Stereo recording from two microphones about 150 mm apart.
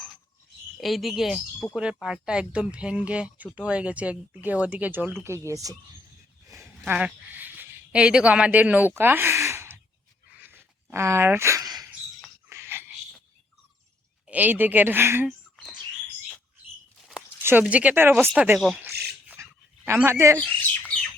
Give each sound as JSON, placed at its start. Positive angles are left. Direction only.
{"t": 0.8, "sound": "speech", "side_deg": 0}
{"t": 6.5, "sound": "a sound", "side_deg": -20}
{"t": 6.9, "sound": "speech", "side_deg": -10}
{"t": 9.0, "sound": "sigh", "side_deg": -15}
{"t": 10.3, "sound": "a sound", "side_deg": -15}
{"t": 14.3, "sound": "speech", "side_deg": -10}
{"t": 17.4, "sound": "speech", "side_deg": -10}
{"t": 19.3, "sound": "dog", "side_deg": -15}
{"t": 20.4, "sound": "bird", "side_deg": 10}